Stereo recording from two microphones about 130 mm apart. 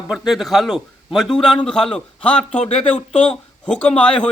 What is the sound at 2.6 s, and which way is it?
Speech, 50° left (ahead or behind).